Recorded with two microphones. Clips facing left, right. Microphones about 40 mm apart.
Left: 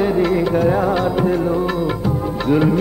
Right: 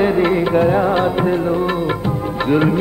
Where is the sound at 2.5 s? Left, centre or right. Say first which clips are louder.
Even; right.